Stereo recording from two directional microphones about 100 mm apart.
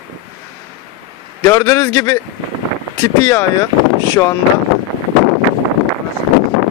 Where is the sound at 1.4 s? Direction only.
30° left (ahead or behind).